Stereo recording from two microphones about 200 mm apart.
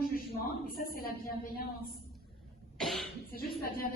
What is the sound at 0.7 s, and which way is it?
Speech, 45° left (ahead or behind).